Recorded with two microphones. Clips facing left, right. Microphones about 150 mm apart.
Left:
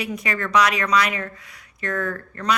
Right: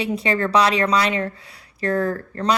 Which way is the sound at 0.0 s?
30° right (ahead or behind).